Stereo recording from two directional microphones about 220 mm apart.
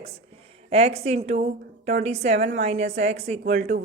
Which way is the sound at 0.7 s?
25° right (ahead or behind).